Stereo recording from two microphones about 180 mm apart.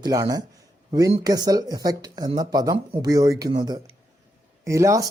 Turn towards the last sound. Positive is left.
turn(degrees=-15)  # may be behind; listen again after turning